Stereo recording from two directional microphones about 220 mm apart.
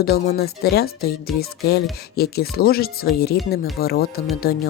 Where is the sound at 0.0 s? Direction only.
45° left (ahead or behind).